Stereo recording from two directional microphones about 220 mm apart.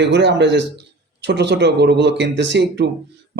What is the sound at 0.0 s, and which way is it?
A man's voice, 50° right (ahead or behind).